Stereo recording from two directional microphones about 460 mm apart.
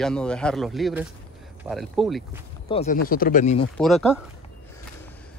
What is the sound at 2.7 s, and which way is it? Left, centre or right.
Speech, centre.